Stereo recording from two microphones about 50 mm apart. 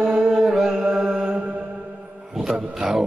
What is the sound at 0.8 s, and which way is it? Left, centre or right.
Mantra, centre.